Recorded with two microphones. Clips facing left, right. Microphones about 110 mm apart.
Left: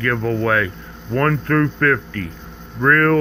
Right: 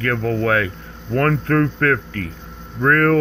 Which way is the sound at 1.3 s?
35° right (ahead or behind).